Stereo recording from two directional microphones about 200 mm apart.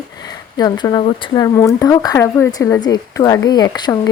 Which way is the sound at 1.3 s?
15° left (ahead or behind).